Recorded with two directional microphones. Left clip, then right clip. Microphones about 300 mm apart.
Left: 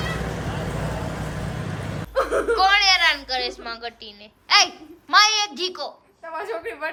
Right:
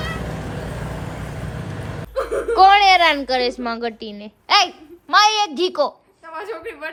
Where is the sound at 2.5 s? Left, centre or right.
Centre.